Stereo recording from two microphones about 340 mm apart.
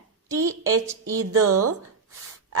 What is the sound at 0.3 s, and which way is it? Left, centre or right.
Speech, right.